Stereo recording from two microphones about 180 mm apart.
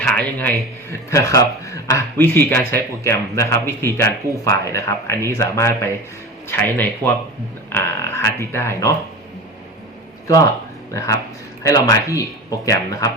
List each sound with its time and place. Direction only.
0.0 s speech: 5° left (ahead or behind)
10.9 s speech: 15° left (ahead or behind)